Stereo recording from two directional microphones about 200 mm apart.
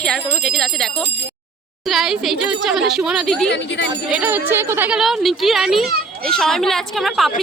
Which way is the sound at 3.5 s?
65° left (ahead or behind).